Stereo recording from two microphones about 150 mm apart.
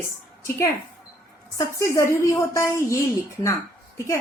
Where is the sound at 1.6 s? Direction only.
20° left (ahead or behind).